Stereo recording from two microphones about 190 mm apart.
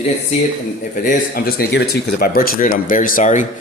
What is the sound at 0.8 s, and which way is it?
Speech, 45° left (ahead or behind).